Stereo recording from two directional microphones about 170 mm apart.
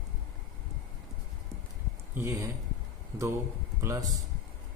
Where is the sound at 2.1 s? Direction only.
15° right (ahead or behind).